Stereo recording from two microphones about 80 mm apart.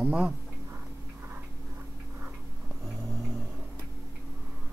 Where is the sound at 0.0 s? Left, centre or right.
Centre.